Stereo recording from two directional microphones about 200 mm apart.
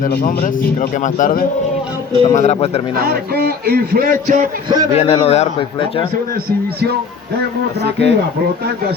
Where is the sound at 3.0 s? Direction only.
50° right (ahead or behind).